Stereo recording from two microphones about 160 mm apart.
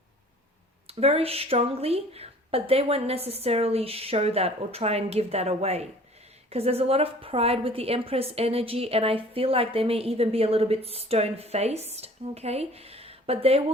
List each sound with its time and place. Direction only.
0.9 s a woman's voice: 40° right (ahead or behind)